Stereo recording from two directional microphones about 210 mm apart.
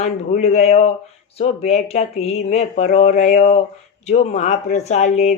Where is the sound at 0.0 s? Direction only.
30° left (ahead or behind).